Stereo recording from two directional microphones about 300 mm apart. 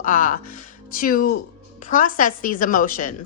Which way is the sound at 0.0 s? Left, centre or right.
Left.